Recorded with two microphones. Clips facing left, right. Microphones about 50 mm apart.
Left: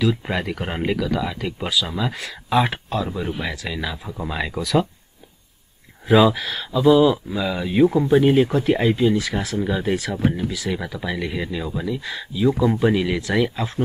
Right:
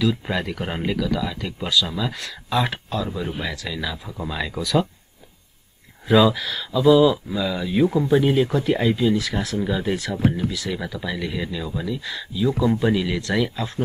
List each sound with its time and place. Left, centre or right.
0.0 s speech: centre
4.3 s speech: centre
6.0 s speech: centre
9.9 s speech: centre